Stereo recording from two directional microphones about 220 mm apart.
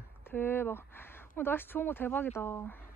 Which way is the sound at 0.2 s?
10° left (ahead or behind).